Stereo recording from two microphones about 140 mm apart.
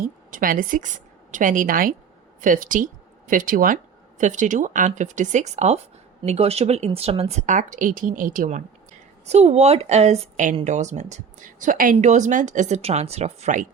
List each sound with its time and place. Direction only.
0.0 s a woman's voice: 85° right
2.4 s speech: 70° right (ahead or behind)
4.2 s speech: 65° right (ahead or behind)
9.2 s speech: 50° right (ahead or behind); by 11.9 s 80° right
11.9 s speech: 60° right (ahead or behind)